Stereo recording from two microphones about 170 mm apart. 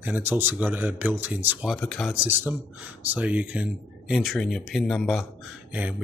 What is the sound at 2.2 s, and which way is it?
Speech, 10° right (ahead or behind).